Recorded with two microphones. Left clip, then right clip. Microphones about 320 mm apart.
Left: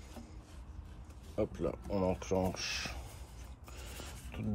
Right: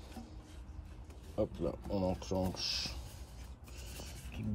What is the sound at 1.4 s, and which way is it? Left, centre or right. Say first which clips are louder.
Speech: left 1 dB; centre.